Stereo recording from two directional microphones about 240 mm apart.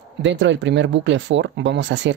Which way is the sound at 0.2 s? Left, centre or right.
Right.